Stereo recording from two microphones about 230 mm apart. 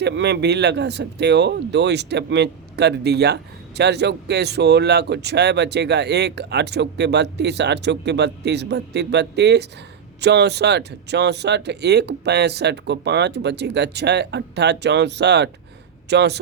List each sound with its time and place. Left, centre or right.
0.0 s speech: right